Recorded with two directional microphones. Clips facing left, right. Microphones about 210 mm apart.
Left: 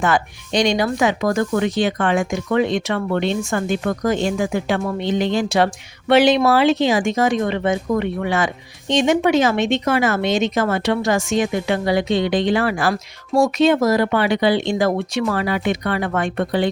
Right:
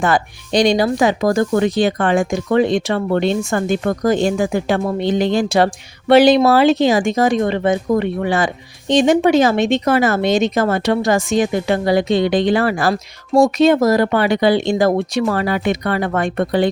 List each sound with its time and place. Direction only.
0.0 s speech: 35° right (ahead or behind)